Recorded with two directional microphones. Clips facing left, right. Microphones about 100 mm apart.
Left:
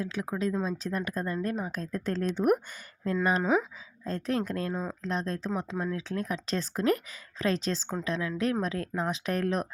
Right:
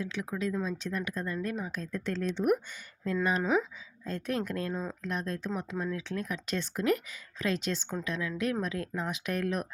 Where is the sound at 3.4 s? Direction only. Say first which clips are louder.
Left 2 dB; 15° left (ahead or behind).